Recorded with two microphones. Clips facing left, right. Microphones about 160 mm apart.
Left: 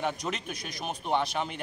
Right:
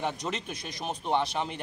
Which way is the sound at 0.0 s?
Centre (ahead or behind).